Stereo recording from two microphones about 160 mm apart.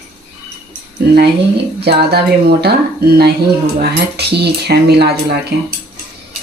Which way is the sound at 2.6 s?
75° right (ahead or behind).